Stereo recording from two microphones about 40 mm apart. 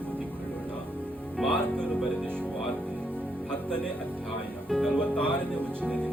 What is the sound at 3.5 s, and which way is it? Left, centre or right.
Music, left.